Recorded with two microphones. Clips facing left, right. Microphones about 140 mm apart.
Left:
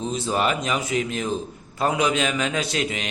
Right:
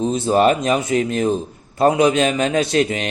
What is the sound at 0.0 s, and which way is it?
A man's voice, 40° right (ahead or behind).